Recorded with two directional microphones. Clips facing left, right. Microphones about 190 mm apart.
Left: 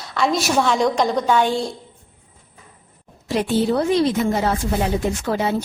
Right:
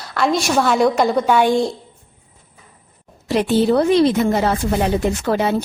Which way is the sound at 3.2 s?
70° right (ahead or behind).